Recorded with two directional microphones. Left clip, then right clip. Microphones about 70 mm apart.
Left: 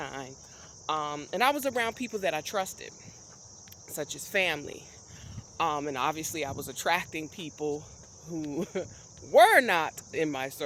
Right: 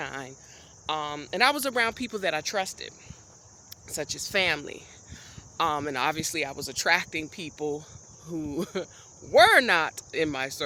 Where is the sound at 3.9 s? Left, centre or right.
Right.